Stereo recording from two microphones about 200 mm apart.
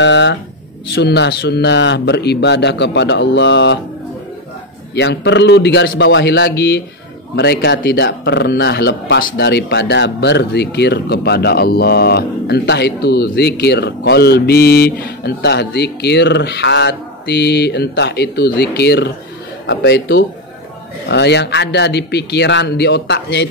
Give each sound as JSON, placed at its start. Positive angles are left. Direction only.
{"t": 0.0, "sound": "speech", "side_deg": 60}
{"t": 4.9, "sound": "speech", "side_deg": 60}